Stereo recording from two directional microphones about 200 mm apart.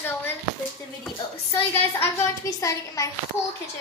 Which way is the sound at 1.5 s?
10° left (ahead or behind).